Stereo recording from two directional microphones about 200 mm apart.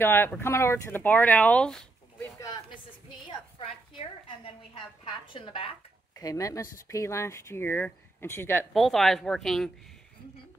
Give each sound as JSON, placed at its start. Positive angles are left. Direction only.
{"t": 0.0, "sound": "speech", "side_deg": 10}
{"t": 2.2, "sound": "a sound", "side_deg": 20}
{"t": 4.7, "sound": "a woman's voice", "side_deg": 25}
{"t": 6.1, "sound": "speech", "side_deg": 15}
{"t": 8.7, "sound": "speech", "side_deg": 0}